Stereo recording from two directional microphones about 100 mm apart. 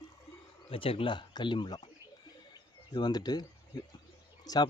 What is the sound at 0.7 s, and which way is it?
Speech, 65° left (ahead or behind).